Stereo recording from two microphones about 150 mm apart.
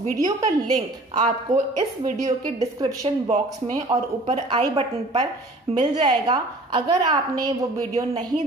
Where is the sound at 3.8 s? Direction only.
45° right (ahead or behind).